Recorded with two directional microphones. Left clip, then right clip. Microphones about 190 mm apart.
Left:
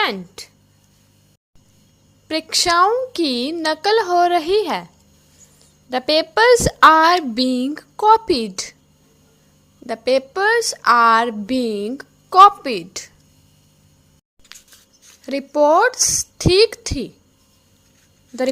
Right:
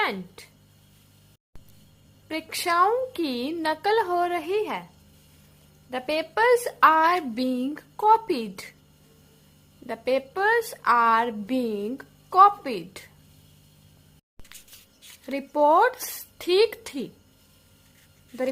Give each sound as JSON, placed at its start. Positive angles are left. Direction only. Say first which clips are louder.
{"t": 0.0, "sound": "speech", "louder": "left 6 dB", "side_deg": 25}
{"t": 2.2, "sound": "a woman's voice", "louder": "left 10 dB", "side_deg": 30}
{"t": 5.9, "sound": "a woman's voice", "louder": "left 10 dB", "side_deg": 35}
{"t": 9.8, "sound": "a woman's voice", "louder": "left 8 dB", "side_deg": 25}
{"t": 14.5, "sound": "a sound", "louder": "left 6 dB", "side_deg": 20}
{"t": 15.1, "sound": "a woman's voice", "louder": "left 7 dB", "side_deg": 20}